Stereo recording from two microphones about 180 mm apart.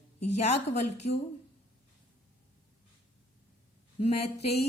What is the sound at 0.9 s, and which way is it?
Speech, 40° left (ahead or behind).